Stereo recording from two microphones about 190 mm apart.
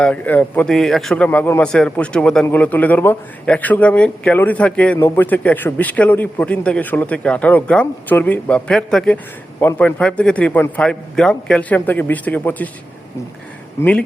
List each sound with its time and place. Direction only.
0.0 s a man's voice: 5° left (ahead or behind)